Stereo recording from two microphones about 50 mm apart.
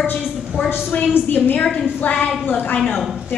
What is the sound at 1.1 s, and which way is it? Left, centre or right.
A woman's voice, left.